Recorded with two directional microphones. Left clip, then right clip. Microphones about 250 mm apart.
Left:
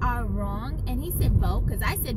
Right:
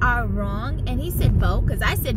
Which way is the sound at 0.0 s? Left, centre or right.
Centre.